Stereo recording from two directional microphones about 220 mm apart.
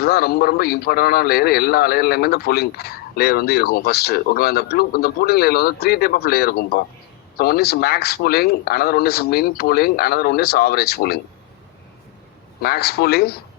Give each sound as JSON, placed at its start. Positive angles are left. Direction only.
{"t": 0.0, "sound": "a man's voice", "side_deg": 45}
{"t": 12.6, "sound": "a man's voice", "side_deg": 45}